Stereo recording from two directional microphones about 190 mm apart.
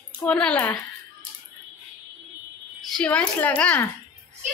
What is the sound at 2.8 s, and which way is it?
A woman's voice, centre (ahead or behind).